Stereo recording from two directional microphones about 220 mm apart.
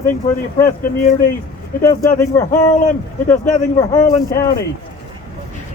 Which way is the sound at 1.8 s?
15° left (ahead or behind).